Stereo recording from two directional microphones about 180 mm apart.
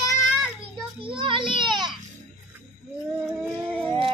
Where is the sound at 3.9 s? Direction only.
30° right (ahead or behind).